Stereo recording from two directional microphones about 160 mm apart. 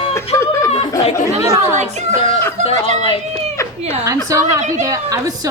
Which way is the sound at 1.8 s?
45° right (ahead or behind).